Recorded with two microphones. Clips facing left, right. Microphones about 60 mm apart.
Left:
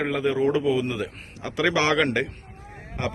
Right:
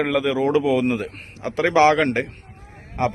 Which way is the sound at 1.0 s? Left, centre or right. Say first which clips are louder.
Right 3 dB; right.